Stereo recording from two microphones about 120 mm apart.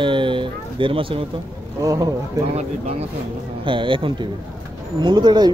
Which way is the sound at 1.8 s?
30° right (ahead or behind).